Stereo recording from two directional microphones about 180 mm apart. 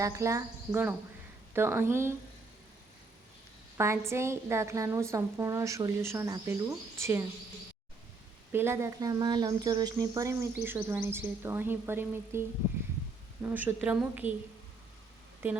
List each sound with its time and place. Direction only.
0.0 s speech: 20° right (ahead or behind)
3.8 s speech: 15° right (ahead or behind)
8.5 s speech: 15° right (ahead or behind)